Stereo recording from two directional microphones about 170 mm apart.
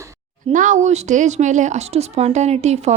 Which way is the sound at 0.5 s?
45° right (ahead or behind).